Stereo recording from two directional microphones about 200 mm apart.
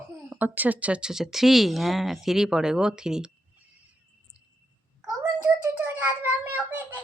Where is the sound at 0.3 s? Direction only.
10° right (ahead or behind).